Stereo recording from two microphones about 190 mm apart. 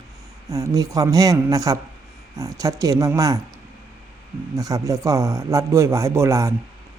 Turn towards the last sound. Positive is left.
turn(degrees=-15)  # may be behind; listen again after turning